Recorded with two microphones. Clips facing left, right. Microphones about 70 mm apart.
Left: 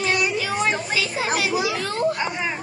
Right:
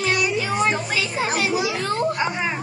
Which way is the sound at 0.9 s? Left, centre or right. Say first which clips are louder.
Even; right.